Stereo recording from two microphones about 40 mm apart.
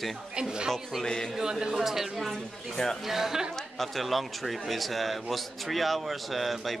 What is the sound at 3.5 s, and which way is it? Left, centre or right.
Speech, centre.